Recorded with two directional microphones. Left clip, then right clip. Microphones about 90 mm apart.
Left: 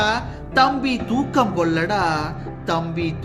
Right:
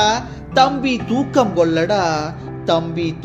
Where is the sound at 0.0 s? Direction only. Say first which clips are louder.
Right 4 dB; 30° right (ahead or behind).